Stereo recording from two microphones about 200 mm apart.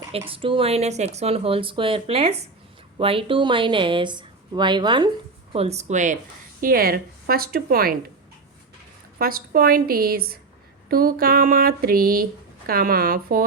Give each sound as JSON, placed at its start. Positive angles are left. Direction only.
{"t": 0.3, "sound": "speech", "side_deg": -25}
{"t": 5.5, "sound": "speech", "side_deg": -30}
{"t": 9.1, "sound": "speech", "side_deg": -45}